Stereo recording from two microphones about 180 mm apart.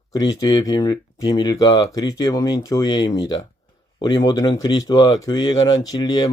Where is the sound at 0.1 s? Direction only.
20° left (ahead or behind).